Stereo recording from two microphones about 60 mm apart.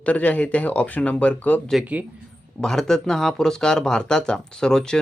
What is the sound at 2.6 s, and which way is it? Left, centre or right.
Speech, centre.